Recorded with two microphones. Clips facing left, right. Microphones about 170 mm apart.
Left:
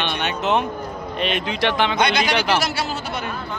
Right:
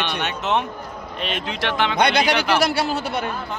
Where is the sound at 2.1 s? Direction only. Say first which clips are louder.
Right 1 dB; 60° right (ahead or behind).